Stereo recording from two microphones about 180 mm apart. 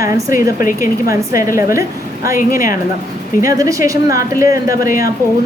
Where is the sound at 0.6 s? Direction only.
50° left (ahead or behind).